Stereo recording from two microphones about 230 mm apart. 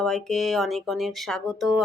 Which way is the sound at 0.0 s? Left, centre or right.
Centre.